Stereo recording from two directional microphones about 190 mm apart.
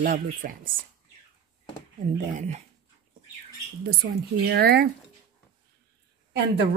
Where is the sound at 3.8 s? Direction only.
55° right (ahead or behind).